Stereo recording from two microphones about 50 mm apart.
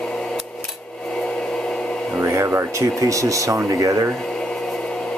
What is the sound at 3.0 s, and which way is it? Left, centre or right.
Speech, right.